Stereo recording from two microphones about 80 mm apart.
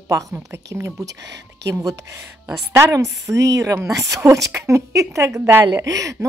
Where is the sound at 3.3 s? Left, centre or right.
Right.